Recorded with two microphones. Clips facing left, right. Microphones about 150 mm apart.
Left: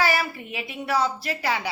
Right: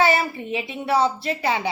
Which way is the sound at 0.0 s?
25° right (ahead or behind).